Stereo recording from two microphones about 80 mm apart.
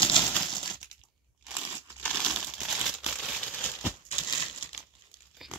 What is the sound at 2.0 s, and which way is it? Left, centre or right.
Crumpling, centre.